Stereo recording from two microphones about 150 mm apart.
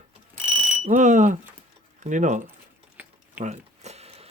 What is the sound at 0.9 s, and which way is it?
Alarm, 55° right (ahead or behind).